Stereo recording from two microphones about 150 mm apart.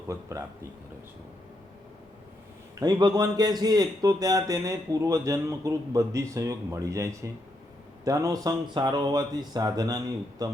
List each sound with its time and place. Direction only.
0.1 s a man's voice: 20° right (ahead or behind)
2.8 s a man's voice: 25° right (ahead or behind)